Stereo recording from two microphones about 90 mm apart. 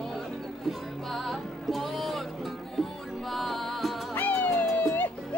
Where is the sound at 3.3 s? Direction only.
Centre (ahead or behind).